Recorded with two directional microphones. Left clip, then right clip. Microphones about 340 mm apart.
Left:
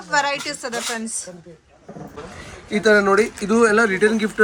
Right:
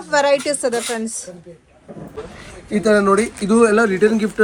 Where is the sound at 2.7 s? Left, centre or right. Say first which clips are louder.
Right 1 dB; centre.